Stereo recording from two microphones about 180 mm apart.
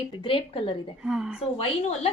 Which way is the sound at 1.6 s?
30° left (ahead or behind).